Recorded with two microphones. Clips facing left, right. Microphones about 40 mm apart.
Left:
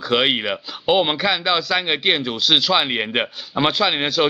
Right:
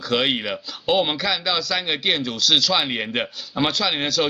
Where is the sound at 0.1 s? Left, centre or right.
Centre.